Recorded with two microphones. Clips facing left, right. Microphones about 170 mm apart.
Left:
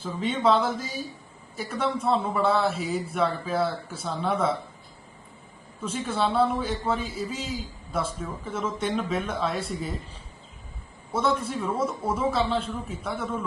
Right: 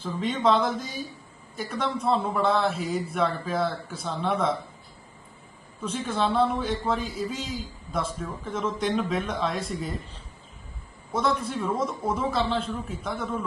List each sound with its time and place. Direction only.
0.0 s a man's voice: 5° left (ahead or behind)
5.8 s a man's voice: 5° left (ahead or behind)
11.1 s a man's voice: 5° left (ahead or behind)